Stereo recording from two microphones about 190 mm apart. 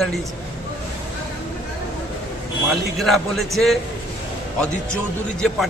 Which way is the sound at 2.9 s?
Centre (ahead or behind).